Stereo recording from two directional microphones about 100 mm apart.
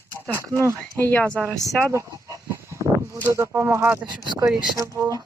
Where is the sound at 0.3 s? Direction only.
30° right (ahead or behind).